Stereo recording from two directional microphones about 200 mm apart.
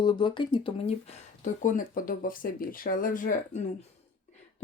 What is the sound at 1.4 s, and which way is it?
Speech, 40° left (ahead or behind).